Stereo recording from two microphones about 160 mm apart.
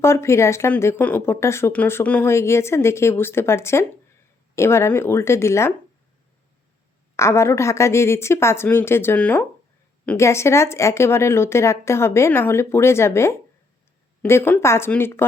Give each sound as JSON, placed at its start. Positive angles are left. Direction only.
{"t": 0.0, "sound": "speech", "side_deg": 15}
{"t": 7.2, "sound": "speech", "side_deg": 15}